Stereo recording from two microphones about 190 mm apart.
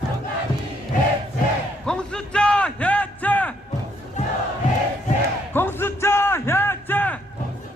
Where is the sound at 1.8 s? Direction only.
5° left (ahead or behind).